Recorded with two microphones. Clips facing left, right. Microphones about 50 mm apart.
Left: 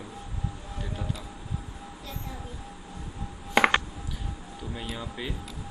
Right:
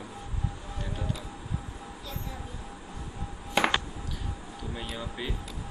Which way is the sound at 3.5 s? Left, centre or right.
Left.